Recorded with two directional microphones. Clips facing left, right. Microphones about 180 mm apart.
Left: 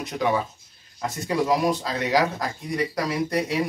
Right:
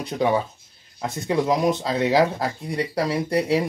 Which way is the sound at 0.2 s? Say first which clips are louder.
Right 3 dB; 30° right (ahead or behind).